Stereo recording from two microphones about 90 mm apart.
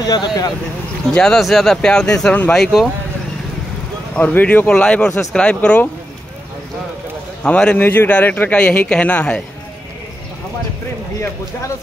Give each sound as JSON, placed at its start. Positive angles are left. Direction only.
{"t": 0.0, "sound": "speech", "side_deg": 50}
{"t": 1.1, "sound": "speech", "side_deg": 5}
{"t": 2.5, "sound": "speech", "side_deg": 0}
{"t": 4.1, "sound": "speech", "side_deg": 20}
{"t": 4.6, "sound": "speech", "side_deg": 10}
{"t": 7.4, "sound": "speech", "side_deg": 15}